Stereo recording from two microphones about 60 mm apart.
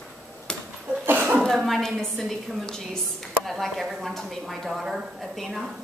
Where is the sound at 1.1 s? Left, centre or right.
Right.